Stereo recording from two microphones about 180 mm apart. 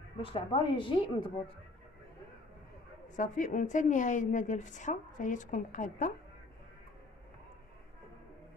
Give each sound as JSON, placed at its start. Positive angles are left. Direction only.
{"t": 0.2, "sound": "a woman's voice", "side_deg": 30}
{"t": 3.2, "sound": "a woman's voice", "side_deg": 45}